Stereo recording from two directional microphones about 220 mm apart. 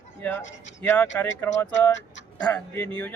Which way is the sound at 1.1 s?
10° left (ahead or behind).